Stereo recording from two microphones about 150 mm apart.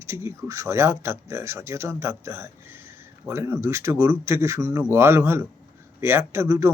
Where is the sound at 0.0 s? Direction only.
20° right (ahead or behind).